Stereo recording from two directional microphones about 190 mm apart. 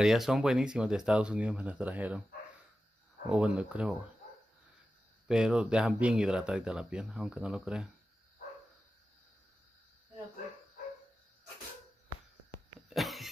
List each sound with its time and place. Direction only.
0.0 s speech: centre (ahead or behind)
3.3 s speech: 5° right (ahead or behind)
5.3 s speech: 5° right (ahead or behind)
12.9 s cough: centre (ahead or behind)